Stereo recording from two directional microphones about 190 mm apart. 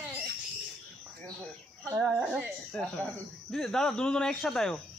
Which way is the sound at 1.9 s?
5° right (ahead or behind).